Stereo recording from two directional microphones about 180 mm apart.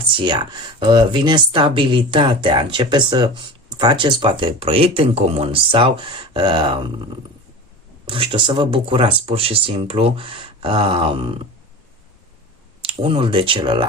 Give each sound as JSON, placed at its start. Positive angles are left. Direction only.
{"t": 0.0, "sound": "speech", "side_deg": -30}
{"t": 12.8, "sound": "speech", "side_deg": -30}